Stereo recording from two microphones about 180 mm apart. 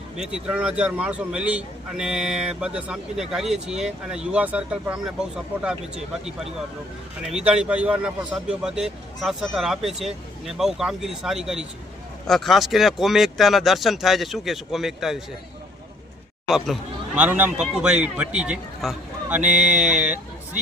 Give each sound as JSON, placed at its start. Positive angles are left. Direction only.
{"t": 0.2, "sound": "a man's voice", "side_deg": -5}
{"t": 7.2, "sound": "a man's voice", "side_deg": -5}
{"t": 16.5, "sound": "a man's voice", "side_deg": 0}
{"t": 19.4, "sound": "speech", "side_deg": -45}
{"t": 19.8, "sound": "speech", "side_deg": -5}